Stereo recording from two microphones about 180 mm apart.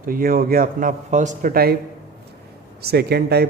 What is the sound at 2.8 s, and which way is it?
Speech, 65° right (ahead or behind).